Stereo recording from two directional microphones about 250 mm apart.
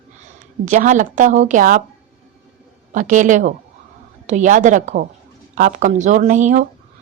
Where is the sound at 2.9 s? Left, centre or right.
Right.